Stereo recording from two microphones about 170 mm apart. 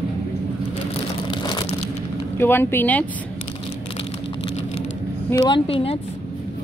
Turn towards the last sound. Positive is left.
turn(degrees=30)  # may be behind; listen again after turning